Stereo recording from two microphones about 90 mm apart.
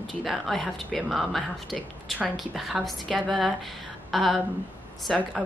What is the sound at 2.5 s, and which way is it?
Speech, centre (ahead or behind).